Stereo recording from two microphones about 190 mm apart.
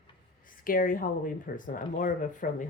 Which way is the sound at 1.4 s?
45° left (ahead or behind).